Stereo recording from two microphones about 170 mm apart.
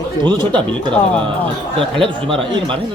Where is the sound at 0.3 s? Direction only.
25° right (ahead or behind).